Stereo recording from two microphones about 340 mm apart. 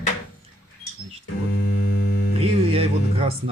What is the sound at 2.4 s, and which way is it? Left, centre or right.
Speech, centre.